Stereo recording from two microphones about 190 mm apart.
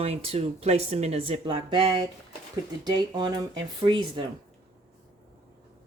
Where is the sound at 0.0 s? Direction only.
30° right (ahead or behind).